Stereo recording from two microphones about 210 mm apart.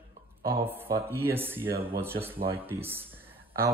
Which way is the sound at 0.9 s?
10° right (ahead or behind).